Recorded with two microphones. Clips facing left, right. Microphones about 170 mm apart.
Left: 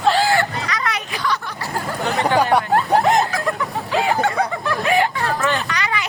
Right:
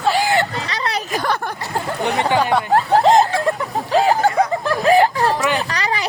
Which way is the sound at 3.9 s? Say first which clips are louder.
Right 4 dB; 35° right (ahead or behind).